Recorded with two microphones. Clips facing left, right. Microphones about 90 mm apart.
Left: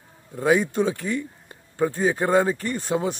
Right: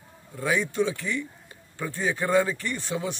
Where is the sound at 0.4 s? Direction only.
40° left (ahead or behind).